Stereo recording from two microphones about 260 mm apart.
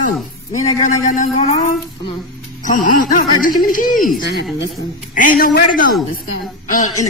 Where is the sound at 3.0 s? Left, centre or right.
Left.